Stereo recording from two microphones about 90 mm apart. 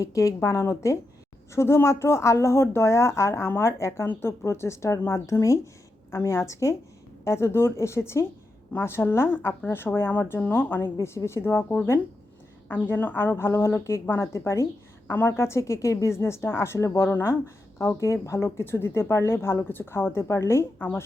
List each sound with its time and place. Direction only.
0.0 s a woman's voice: 35° left (ahead or behind)
12.9 s speech: 20° left (ahead or behind)
20.7 s speech: 20° left (ahead or behind)